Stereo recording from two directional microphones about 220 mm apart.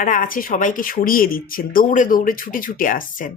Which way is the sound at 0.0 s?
35° left (ahead or behind).